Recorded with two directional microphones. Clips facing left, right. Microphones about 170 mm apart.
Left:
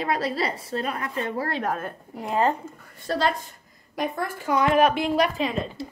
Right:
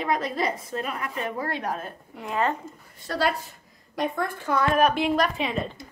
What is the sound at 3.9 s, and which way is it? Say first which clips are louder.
Speech: right 1 dB; 5° left (ahead or behind).